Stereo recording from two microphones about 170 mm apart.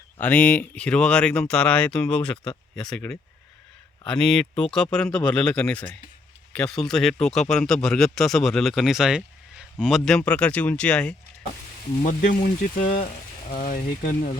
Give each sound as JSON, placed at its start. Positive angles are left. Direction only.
{"t": 0.2, "sound": "a man's voice", "side_deg": 10}
{"t": 12.0, "sound": "speech", "side_deg": 50}